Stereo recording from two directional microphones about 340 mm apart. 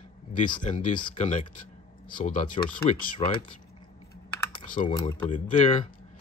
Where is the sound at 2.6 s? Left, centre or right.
Centre.